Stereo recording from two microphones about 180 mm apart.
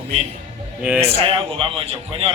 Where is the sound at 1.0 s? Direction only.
35° right (ahead or behind).